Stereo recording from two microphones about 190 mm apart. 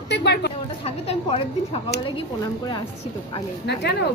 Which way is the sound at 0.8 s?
30° left (ahead or behind).